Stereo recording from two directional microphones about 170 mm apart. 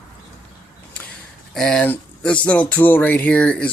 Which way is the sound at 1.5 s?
5° left (ahead or behind).